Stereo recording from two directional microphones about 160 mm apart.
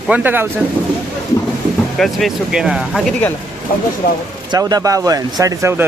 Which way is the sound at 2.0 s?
Centre (ahead or behind).